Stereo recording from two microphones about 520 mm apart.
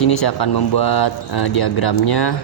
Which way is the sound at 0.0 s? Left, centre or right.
Left.